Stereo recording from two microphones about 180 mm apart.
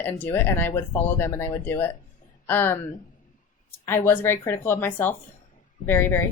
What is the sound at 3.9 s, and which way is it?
Speech, 10° left (ahead or behind).